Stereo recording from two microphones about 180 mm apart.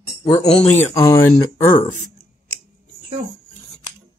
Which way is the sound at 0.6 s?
10° left (ahead or behind).